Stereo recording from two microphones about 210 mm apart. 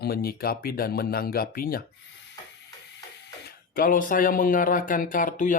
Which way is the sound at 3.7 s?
40° left (ahead or behind).